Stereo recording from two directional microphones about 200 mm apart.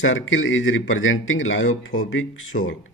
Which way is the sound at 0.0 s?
75° left (ahead or behind).